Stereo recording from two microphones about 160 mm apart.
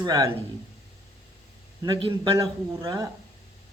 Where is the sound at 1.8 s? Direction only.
30° right (ahead or behind).